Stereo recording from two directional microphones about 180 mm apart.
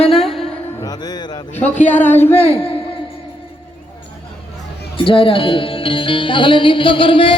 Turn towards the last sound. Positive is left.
turn(degrees=30)  # may be behind; listen again after turning